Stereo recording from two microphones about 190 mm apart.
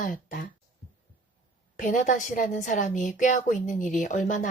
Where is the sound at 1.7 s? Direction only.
40° left (ahead or behind).